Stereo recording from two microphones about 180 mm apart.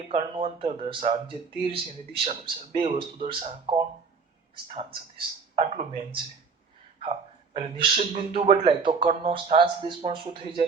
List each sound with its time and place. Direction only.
0.1 s a man's voice: 30° right (ahead or behind)
7.5 s speech: 30° right (ahead or behind)